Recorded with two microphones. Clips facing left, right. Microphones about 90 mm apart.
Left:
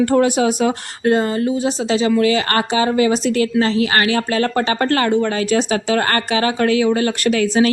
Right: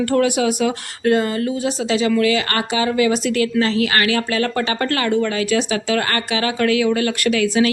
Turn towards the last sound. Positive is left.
turn(degrees=35)  # may be behind; listen again after turning